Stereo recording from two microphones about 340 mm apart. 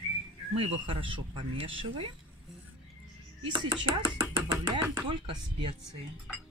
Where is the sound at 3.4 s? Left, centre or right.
Centre.